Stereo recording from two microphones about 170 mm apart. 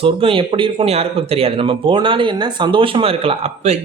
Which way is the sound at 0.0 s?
30° right (ahead or behind).